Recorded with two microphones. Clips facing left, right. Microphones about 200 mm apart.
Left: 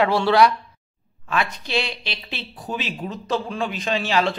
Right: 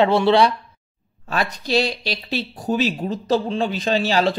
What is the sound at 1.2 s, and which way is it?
Speech, 35° right (ahead or behind).